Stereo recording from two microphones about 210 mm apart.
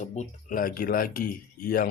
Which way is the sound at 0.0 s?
35° left (ahead or behind).